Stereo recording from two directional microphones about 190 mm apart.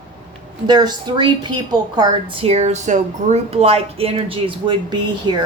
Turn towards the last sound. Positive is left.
turn(degrees=-25)  # may be behind; listen again after turning